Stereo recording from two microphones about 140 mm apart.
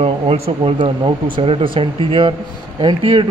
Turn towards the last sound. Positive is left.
turn(degrees=-35)  # may be behind; listen again after turning